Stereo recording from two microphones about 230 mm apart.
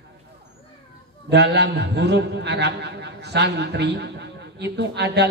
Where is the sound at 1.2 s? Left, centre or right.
Right.